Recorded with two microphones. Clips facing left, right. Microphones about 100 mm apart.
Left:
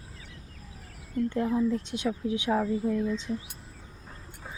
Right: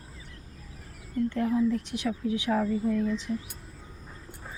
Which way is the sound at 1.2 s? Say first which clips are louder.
Right 1 dB; 20° left (ahead or behind).